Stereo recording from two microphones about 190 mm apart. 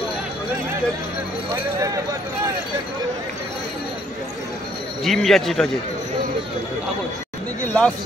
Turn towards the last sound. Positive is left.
turn(degrees=5)  # may be behind; listen again after turning